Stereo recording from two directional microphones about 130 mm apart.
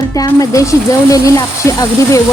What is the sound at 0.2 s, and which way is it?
Speech, 25° left (ahead or behind).